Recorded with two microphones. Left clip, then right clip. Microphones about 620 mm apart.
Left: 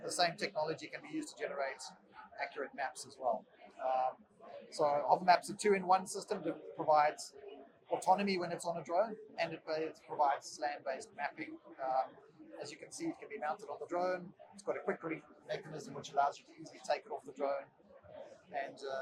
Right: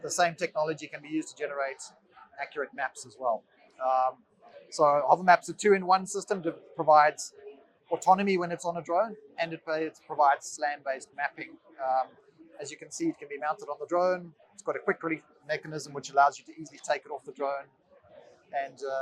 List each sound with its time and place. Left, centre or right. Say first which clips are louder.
0.0 s speech: right 7 dB; right
4.7 s a man's voice: right 9 dB; right
16.8 s a man's voice: right 6 dB; right